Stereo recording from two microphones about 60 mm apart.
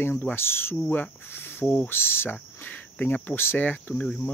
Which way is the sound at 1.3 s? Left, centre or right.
Left.